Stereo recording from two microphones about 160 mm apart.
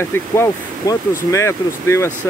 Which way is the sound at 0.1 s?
15° left (ahead or behind).